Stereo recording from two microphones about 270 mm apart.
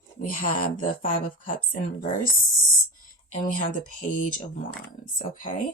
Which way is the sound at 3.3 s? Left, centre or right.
Left.